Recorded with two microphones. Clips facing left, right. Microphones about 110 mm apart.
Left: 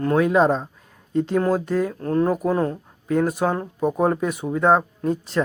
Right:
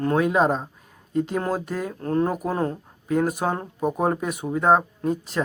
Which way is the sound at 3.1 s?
15° right (ahead or behind).